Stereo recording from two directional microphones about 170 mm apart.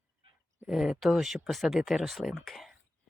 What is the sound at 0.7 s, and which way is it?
Speech, centre (ahead or behind).